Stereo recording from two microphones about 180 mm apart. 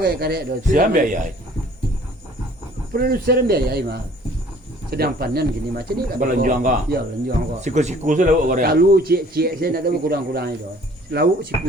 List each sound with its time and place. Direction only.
0.0 s a man's voice: 60° right (ahead or behind)
2.9 s speech: 60° right (ahead or behind)
7.6 s speech: 40° right (ahead or behind); by 10.5 s 60° right (ahead or behind)